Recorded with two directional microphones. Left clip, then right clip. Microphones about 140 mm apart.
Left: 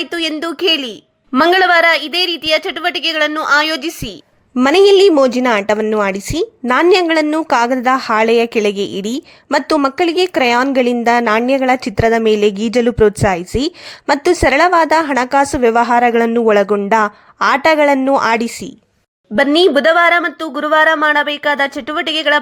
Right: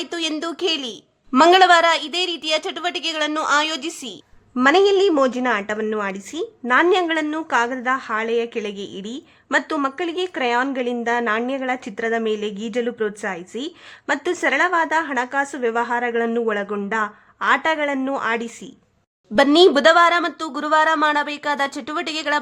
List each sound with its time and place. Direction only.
0.0 s speech: 15° left (ahead or behind)
4.6 s a woman's voice: 35° left (ahead or behind)
19.5 s speech: 10° left (ahead or behind)